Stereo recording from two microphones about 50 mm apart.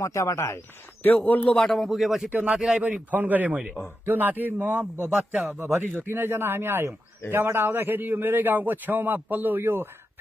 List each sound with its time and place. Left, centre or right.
0.0 s speech: left
1.0 s a man's voice: left
1.7 s speech: centre
2.8 s a man's voice: right
5.1 s speech: centre
5.5 s a man's voice: right
9.6 s speech: right